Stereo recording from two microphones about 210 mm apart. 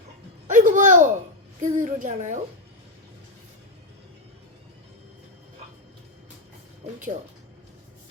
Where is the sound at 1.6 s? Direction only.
35° right (ahead or behind).